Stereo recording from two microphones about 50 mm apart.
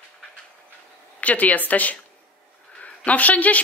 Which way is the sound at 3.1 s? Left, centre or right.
Left.